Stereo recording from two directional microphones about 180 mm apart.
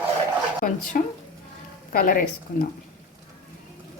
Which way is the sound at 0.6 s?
50° left (ahead or behind).